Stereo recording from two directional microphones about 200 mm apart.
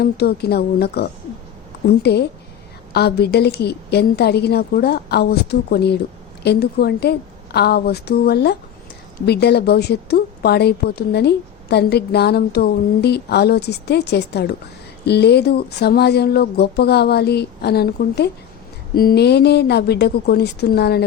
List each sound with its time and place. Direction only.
0.0 s a woman's voice: 55° left (ahead or behind)